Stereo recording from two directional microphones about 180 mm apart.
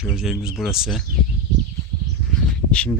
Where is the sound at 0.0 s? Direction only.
5° right (ahead or behind).